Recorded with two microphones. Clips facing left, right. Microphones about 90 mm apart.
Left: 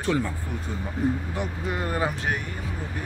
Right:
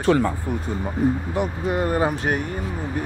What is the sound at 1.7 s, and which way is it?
Speech, 40° right (ahead or behind).